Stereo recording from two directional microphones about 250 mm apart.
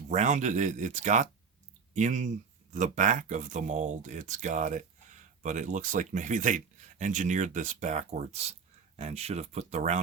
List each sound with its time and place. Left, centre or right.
0.1 s speech: right